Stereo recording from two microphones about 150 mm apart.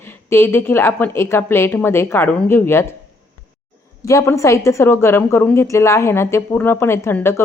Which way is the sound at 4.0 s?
20° left (ahead or behind).